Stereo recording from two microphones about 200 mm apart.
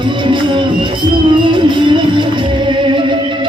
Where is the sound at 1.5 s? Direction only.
25° right (ahead or behind).